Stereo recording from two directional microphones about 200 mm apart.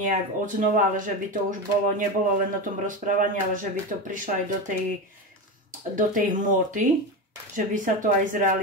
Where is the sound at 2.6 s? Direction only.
40° right (ahead or behind).